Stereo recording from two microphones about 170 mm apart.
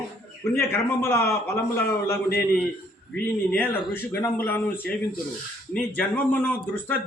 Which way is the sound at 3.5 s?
10° left (ahead or behind).